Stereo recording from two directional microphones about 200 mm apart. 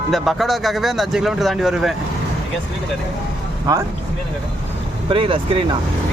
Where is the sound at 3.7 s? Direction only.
15° right (ahead or behind).